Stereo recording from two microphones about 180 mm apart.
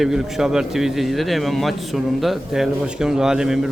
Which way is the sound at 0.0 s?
Centre (ahead or behind).